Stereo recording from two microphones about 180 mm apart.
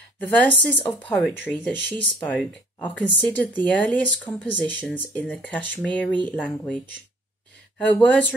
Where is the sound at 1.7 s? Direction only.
80° right.